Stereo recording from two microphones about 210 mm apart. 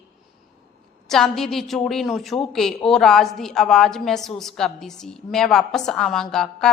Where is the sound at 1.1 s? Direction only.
Centre (ahead or behind).